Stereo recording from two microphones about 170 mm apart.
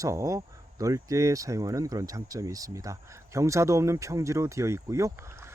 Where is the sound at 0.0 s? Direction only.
20° right (ahead or behind).